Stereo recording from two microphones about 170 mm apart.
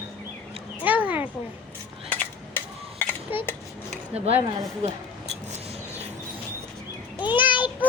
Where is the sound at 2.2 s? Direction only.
10° left (ahead or behind).